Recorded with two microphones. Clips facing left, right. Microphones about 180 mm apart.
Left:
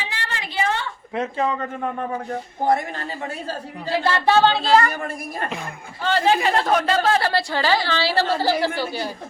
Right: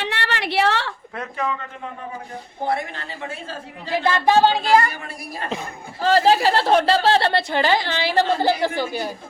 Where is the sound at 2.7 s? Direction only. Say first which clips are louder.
Left 4 dB; 45° left (ahead or behind).